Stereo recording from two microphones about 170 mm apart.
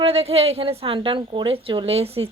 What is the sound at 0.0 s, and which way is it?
A woman's voice, 35° right (ahead or behind).